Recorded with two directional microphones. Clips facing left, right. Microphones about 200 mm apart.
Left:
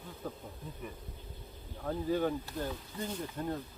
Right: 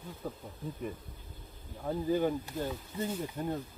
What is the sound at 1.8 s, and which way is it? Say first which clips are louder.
Speech: right 2 dB; 10° right (ahead or behind).